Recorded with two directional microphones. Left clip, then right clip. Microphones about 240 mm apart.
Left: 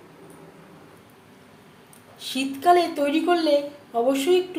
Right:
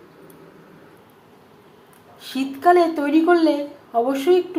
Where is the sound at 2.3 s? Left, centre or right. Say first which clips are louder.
Right 3 dB; centre.